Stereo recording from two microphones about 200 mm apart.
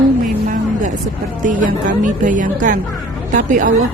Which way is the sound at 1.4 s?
40° right (ahead or behind).